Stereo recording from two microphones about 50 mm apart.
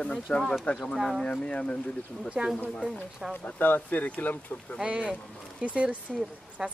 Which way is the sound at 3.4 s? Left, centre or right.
Left.